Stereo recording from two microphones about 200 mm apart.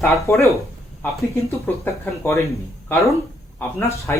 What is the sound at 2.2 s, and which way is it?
Speech, 15° left (ahead or behind).